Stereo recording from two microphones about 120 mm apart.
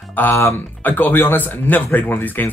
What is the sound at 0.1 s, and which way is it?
Speech, 15° left (ahead or behind).